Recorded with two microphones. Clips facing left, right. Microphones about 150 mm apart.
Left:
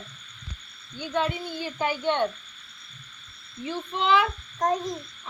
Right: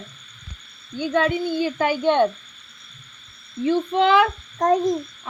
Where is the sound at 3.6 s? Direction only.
70° right (ahead or behind); by 4.9 s 50° right (ahead or behind).